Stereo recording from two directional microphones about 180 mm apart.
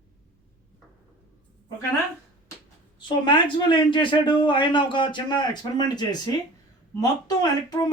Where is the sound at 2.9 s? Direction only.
25° left (ahead or behind).